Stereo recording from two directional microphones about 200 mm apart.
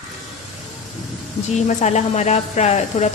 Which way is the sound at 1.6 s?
35° left (ahead or behind).